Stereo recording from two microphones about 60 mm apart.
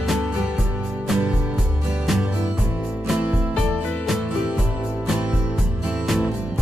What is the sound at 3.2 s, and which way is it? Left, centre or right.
Music, centre.